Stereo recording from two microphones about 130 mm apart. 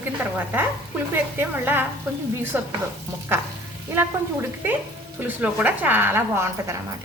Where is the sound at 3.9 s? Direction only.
15° right (ahead or behind).